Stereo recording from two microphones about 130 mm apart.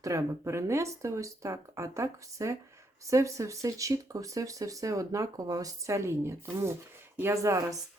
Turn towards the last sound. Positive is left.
turn(degrees=-25)  # may be behind; listen again after turning